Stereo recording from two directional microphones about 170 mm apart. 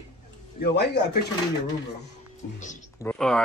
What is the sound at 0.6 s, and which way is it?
Speech, 80° left.